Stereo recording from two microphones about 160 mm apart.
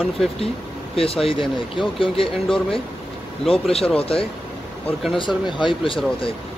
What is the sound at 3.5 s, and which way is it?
Speech, 40° left (ahead or behind).